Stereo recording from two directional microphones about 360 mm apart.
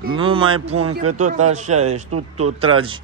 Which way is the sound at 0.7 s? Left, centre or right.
Right.